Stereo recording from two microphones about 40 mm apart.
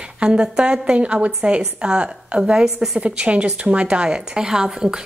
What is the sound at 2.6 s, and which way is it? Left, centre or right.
Speech, centre.